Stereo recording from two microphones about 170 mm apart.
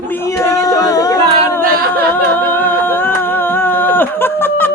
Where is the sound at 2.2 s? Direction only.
10° left (ahead or behind).